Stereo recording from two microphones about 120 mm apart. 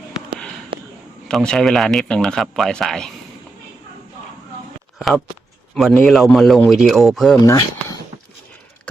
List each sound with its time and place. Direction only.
0.7 s a sound: 45° right (ahead or behind)
1.3 s speech: 5° left (ahead or behind)
4.9 s speech: centre (ahead or behind)
7.4 s speech: 25° left (ahead or behind)